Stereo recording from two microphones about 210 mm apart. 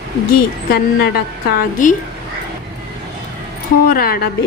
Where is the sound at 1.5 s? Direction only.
40° left (ahead or behind).